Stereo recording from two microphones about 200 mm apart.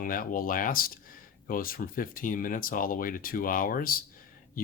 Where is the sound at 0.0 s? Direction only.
45° left (ahead or behind).